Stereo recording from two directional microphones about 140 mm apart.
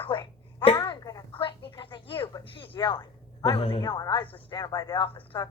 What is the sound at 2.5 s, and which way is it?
A woman's voice, 35° left (ahead or behind).